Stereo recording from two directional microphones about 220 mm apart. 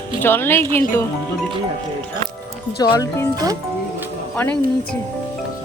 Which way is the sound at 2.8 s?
15° left (ahead or behind).